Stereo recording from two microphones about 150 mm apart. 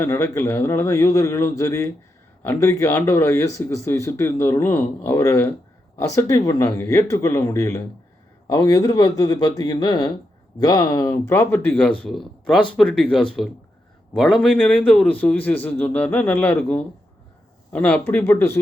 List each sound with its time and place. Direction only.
0.0 s a man's voice: 15° left (ahead or behind)
11.3 s speech: 15° left (ahead or behind)
14.5 s speech: 10° left (ahead or behind)